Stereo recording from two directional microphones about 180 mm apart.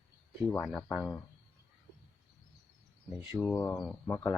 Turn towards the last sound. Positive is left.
turn(degrees=10)  # may be behind; listen again after turning